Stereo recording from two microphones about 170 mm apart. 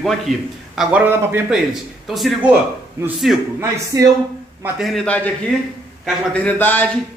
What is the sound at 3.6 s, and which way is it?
Speech, 20° right (ahead or behind).